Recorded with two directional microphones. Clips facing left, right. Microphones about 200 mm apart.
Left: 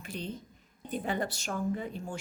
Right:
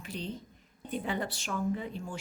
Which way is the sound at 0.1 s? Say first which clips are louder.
Even; 50° left (ahead or behind).